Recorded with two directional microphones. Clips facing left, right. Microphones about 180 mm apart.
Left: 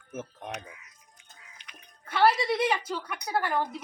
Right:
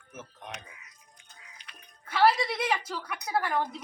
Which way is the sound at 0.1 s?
50° left (ahead or behind).